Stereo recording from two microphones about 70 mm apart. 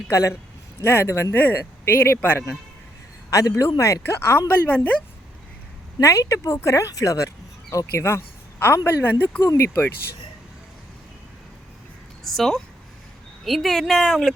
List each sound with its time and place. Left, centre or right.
0.1 s speech: left
3.2 s a man's voice: left
6.0 s a woman's voice: left
12.2 s a woman's voice: centre